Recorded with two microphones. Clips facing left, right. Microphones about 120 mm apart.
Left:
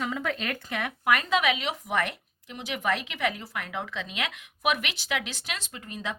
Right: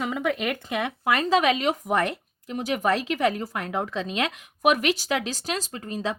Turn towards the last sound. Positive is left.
turn(degrees=-35)  # may be behind; listen again after turning